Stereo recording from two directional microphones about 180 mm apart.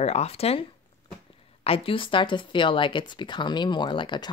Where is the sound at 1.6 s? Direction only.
30° left (ahead or behind).